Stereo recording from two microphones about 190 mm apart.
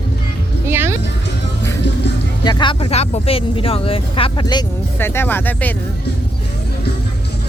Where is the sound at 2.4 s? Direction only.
25° left (ahead or behind).